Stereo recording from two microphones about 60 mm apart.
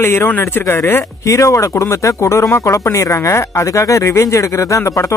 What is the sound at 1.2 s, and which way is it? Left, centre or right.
Speech, left.